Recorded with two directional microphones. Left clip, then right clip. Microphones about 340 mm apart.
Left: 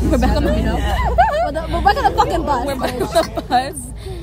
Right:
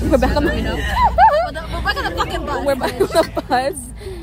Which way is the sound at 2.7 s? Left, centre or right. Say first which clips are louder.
Right 2 dB; centre.